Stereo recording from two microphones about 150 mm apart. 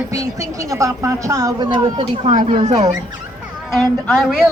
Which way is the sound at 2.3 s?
50° right (ahead or behind).